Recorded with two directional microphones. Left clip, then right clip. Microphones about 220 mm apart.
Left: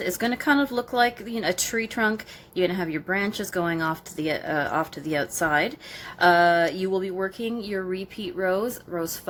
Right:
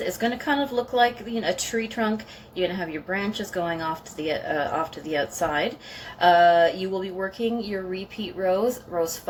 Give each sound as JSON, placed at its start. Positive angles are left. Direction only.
{"t": 0.0, "sound": "speech", "side_deg": 50}